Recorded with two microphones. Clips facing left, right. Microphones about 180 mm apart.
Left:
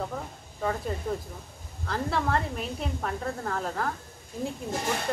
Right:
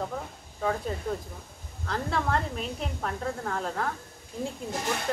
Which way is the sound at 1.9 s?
Centre (ahead or behind).